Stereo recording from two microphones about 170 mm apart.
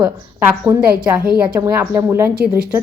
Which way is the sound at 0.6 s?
10° right (ahead or behind).